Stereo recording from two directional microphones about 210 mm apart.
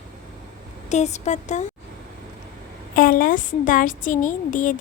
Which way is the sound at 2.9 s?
45° left (ahead or behind).